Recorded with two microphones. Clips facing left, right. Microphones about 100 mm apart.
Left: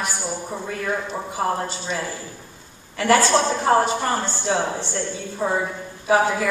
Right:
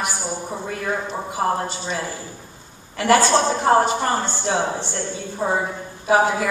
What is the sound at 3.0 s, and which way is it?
A woman's voice, 25° right (ahead or behind).